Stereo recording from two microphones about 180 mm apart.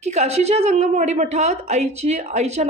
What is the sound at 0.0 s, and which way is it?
A woman's voice, 35° right (ahead or behind).